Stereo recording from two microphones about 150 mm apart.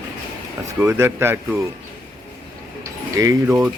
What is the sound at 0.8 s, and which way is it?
Speech, 15° right (ahead or behind).